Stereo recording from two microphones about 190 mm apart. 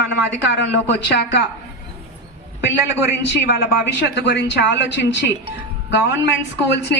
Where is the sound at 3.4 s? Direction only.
65° left (ahead or behind).